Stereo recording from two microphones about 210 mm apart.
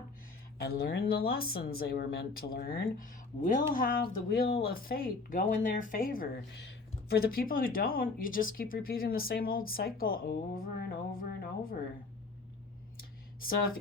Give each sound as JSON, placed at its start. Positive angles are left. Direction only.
{"t": 0.7, "sound": "speech", "side_deg": 45}